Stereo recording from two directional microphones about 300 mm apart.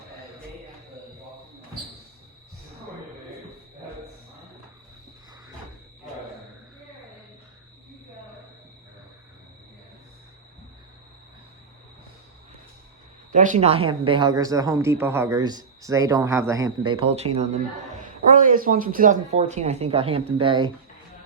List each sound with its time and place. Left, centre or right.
13.3 s speech: right